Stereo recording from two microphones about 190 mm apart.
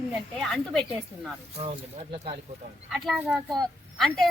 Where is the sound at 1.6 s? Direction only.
30° right (ahead or behind).